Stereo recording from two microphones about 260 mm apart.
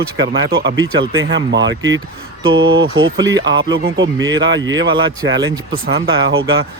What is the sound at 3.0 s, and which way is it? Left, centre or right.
Speech, centre.